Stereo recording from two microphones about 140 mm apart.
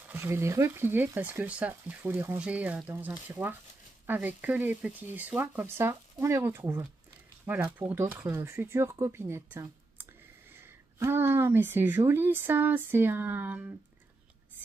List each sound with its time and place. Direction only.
0.0 s speech: 15° right (ahead or behind)